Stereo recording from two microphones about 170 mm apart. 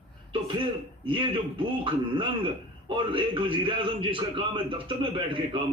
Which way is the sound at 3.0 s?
30° right (ahead or behind).